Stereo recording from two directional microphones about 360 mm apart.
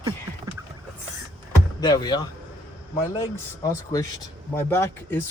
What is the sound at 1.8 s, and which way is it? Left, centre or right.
Speech, centre.